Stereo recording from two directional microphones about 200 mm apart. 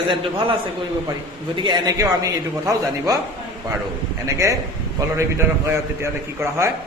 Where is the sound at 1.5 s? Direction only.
20° right (ahead or behind).